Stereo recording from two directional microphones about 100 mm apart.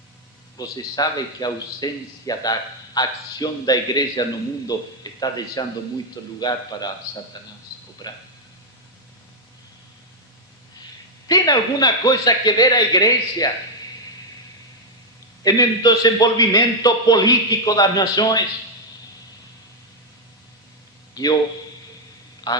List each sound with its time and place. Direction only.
0.5 s a man's voice: 40° left (ahead or behind)
5.0 s a sound: 40° left (ahead or behind)
5.6 s a man's voice: 40° left (ahead or behind)
11.3 s a man's voice: 40° left (ahead or behind)
15.4 s a man's voice: 40° left (ahead or behind)
21.2 s a man's voice: 40° left (ahead or behind)
22.5 s a man's voice: 45° left (ahead or behind)